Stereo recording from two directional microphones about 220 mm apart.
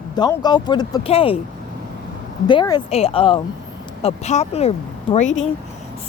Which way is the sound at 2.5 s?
20° left (ahead or behind).